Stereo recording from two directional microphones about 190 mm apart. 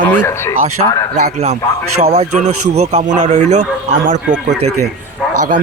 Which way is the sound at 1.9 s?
35° right (ahead or behind).